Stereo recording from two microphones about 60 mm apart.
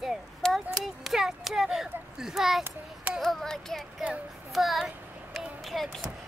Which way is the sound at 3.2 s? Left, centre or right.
Centre.